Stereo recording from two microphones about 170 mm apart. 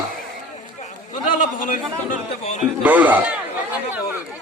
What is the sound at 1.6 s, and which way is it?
Speech, 50° left (ahead or behind).